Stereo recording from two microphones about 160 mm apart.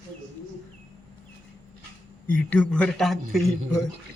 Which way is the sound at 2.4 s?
5° left (ahead or behind).